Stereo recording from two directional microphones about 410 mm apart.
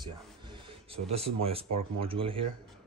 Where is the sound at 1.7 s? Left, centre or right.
Centre.